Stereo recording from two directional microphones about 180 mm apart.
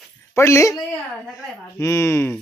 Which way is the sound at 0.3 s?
15° left (ahead or behind).